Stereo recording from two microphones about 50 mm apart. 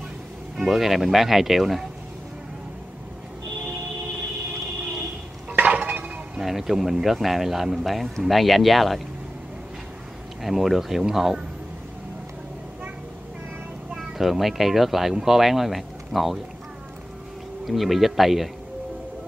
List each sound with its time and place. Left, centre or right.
0.6 s speech: centre
5.5 s dishes: right
6.4 s speech: centre
10.4 s speech: centre
13.9 s speech: centre
17.6 s speech: centre